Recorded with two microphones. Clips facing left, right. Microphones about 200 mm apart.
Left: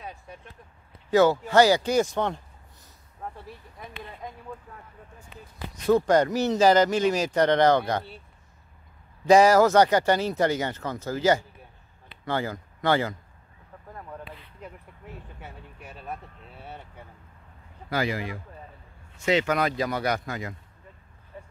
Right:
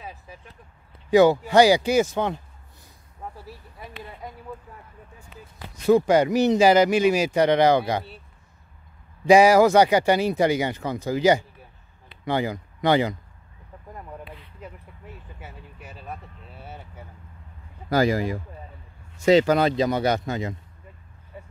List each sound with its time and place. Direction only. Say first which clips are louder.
0.0 s a sound: even; centre (ahead or behind)
1.1 s speech: right 3 dB; 15° right (ahead or behind)
5.9 s speech: right 3 dB; 10° right (ahead or behind)
9.3 s speech: right 2 dB; 10° right (ahead or behind)
14.6 s vehicle: even; centre (ahead or behind)
17.8 s speech: right 7 dB; 40° right (ahead or behind); by 20.5 s 25° right (ahead or behind)
21.3 s a sound: right 1 dB; 10° right (ahead or behind)